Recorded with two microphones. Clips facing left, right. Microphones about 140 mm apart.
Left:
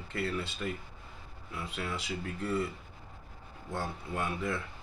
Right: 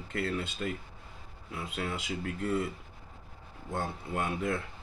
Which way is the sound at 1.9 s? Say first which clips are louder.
Right 2 dB; 50° right (ahead or behind).